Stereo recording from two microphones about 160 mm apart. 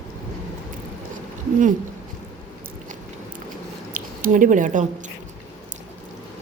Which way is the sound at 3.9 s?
60° right (ahead or behind).